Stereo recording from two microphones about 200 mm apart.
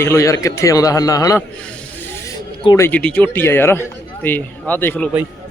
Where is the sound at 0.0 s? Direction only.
15° left (ahead or behind).